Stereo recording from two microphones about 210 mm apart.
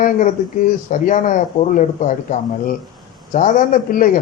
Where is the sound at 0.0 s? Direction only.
40° left (ahead or behind).